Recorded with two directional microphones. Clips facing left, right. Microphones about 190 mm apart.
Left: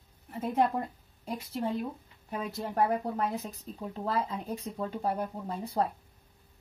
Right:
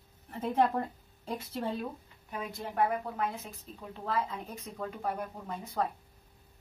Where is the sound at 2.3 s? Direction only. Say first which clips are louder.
Left 4 dB; 40° left (ahead or behind).